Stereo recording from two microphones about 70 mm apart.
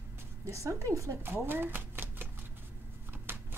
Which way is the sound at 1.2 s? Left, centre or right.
Right.